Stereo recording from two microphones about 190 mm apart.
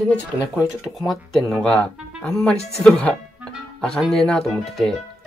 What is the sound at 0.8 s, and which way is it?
Speech, centre (ahead or behind).